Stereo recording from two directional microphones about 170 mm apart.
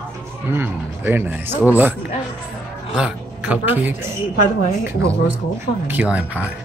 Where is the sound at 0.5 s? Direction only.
10° right (ahead or behind).